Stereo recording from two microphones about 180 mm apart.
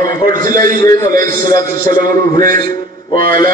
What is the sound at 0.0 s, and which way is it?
Speech, 50° right (ahead or behind).